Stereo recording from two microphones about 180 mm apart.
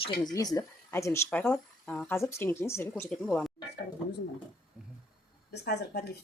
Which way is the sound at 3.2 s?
Centre (ahead or behind).